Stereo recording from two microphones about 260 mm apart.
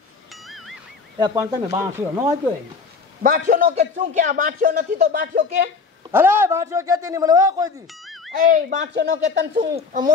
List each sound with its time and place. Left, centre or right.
0.3 s music: centre
1.1 s speech: centre
3.2 s a man's voice: right
6.1 s speech: centre
7.9 s music: centre
8.5 s a man's voice: right